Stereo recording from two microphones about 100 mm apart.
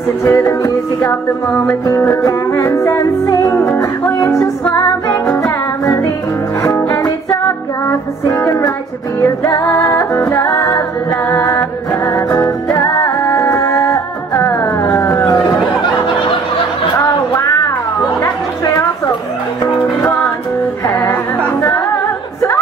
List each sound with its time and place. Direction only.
0.2 s music: 30° left (ahead or behind)
18.2 s chatter: 30° left (ahead or behind)
21.1 s music: 25° left (ahead or behind)